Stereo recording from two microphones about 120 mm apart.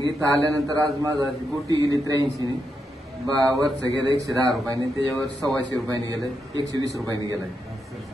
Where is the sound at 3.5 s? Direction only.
30° right (ahead or behind).